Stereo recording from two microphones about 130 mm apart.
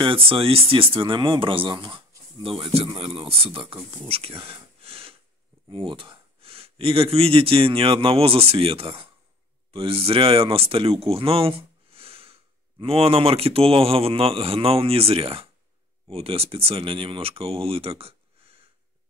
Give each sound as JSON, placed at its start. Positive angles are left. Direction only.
{"t": 0.0, "sound": "speech", "side_deg": -45}